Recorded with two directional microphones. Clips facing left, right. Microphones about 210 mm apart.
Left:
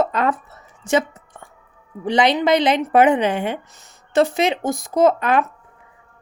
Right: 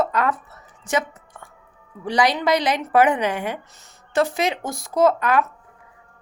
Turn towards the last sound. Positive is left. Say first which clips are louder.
# left 2 dB
turn(degrees=25)  # may be behind; listen again after turning